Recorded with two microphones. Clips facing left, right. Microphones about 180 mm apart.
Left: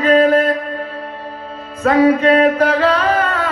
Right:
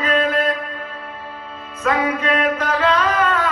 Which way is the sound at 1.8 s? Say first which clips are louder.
Left 8 dB; 35° left (ahead or behind).